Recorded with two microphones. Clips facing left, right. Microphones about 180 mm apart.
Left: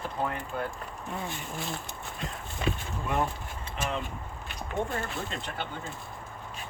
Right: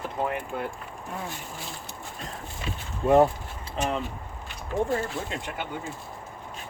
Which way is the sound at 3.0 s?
30° right (ahead or behind).